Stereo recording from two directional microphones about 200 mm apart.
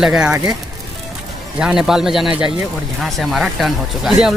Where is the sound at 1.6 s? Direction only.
5° right (ahead or behind).